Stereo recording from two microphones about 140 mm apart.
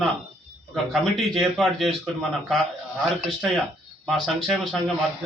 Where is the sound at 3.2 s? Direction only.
Centre (ahead or behind).